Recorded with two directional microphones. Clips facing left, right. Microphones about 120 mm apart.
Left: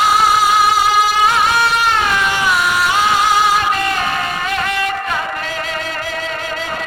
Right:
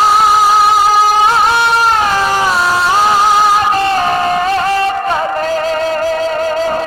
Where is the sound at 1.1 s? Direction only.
35° right (ahead or behind).